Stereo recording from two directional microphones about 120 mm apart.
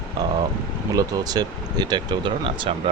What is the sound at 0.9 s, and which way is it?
Speech, 30° right (ahead or behind).